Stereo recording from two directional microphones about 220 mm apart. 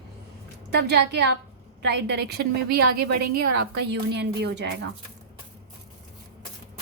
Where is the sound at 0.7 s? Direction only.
50° right (ahead or behind).